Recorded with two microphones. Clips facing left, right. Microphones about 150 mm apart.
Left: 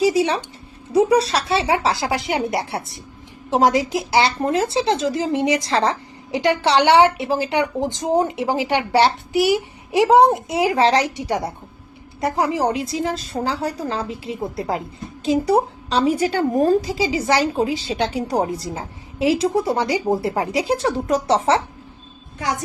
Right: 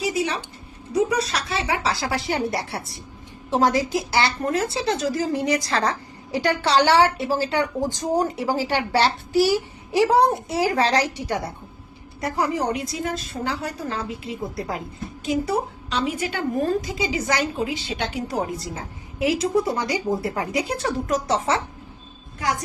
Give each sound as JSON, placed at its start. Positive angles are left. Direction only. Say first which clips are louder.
{"t": 0.0, "sound": "a woman's voice", "louder": "left 7 dB", "side_deg": 30}